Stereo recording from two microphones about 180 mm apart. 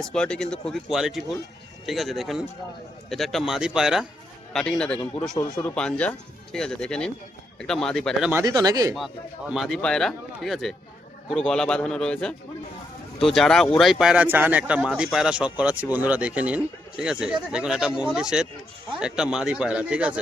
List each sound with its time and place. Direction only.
0.0 s speech: 5° left (ahead or behind)
8.3 s speech: 20° right (ahead or behind)
9.5 s speech: centre (ahead or behind)